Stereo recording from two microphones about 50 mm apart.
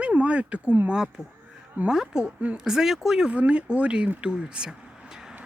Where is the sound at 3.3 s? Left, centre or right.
Right.